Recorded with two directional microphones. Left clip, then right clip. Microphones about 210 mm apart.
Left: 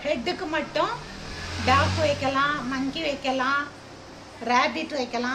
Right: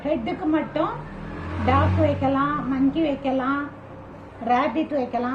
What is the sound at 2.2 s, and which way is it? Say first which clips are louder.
A woman's voice: right 1 dB; 40° left (ahead or behind).